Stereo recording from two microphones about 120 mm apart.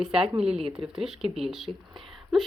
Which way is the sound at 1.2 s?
55° right (ahead or behind).